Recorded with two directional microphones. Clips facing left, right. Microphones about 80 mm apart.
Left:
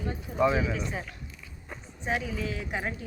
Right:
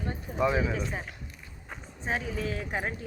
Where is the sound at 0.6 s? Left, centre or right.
Right.